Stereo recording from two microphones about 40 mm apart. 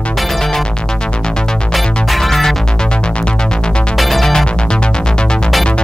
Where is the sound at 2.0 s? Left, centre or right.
Centre.